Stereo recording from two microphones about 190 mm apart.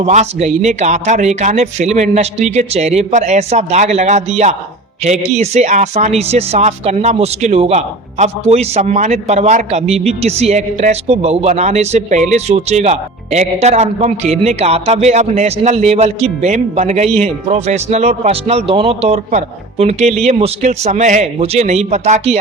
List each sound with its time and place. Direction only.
0.0 s speech: 35° right (ahead or behind)